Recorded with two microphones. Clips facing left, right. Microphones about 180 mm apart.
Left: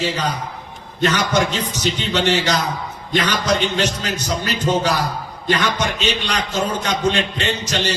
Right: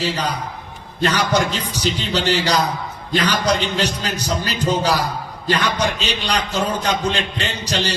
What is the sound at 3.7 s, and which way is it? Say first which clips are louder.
A man's voice: left 1 dB; 35° right (ahead or behind).